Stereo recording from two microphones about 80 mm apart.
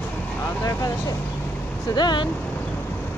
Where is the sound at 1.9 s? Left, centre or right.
Left.